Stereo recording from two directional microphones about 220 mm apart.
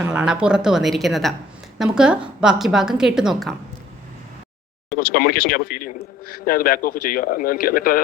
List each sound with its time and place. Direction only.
0.0 s a woman's voice: 5° right (ahead or behind)
4.9 s a man's voice: 40° left (ahead or behind)